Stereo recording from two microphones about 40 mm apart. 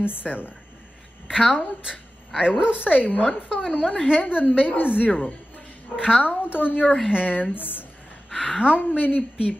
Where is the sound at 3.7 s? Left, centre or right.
Left.